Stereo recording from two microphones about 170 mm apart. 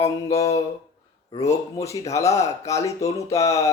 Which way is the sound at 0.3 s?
20° left (ahead or behind).